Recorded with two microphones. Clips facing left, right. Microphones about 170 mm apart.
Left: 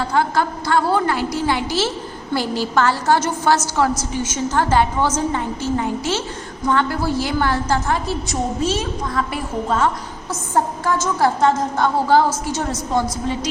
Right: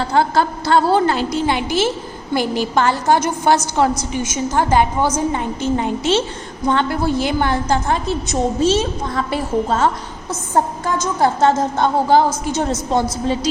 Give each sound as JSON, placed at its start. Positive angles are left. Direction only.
{"t": 0.0, "sound": "a woman's voice", "side_deg": -30}
{"t": 10.8, "sound": "a woman's voice", "side_deg": -15}